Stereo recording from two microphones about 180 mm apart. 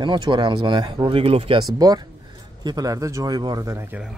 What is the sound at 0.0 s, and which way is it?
Speech, 25° right (ahead or behind).